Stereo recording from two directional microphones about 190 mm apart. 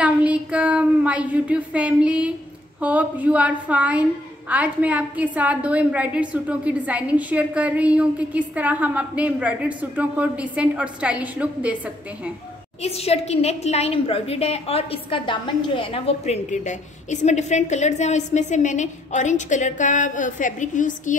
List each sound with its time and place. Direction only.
0.0 s child singing: 5° right (ahead or behind)
2.8 s a woman's voice: 10° right (ahead or behind)
12.8 s a woman's voice: 30° left (ahead or behind)